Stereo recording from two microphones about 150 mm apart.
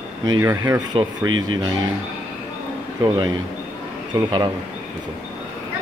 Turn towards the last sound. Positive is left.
turn(degrees=-25)  # may be behind; listen again after turning